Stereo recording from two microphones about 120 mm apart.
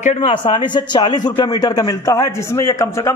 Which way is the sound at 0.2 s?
45° left (ahead or behind).